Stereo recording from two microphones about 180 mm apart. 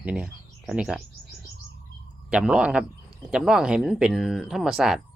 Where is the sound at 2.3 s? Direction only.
5° right (ahead or behind).